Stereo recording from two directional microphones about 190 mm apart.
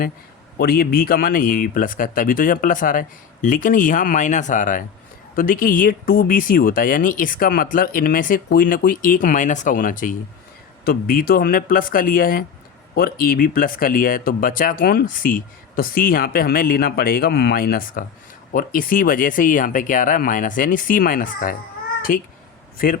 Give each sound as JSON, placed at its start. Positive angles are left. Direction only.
{"t": 0.6, "sound": "speech", "side_deg": 55}